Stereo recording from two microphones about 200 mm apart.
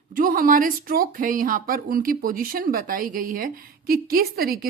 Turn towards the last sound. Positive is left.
turn(degrees=-45)  # may be behind; listen again after turning